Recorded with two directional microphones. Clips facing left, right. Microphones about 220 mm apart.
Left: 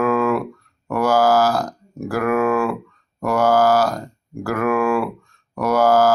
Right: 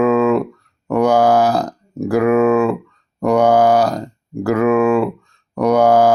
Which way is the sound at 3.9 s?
20° right (ahead or behind).